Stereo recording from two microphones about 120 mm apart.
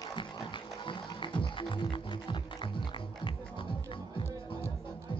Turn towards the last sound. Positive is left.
turn(degrees=45)  # may be behind; listen again after turning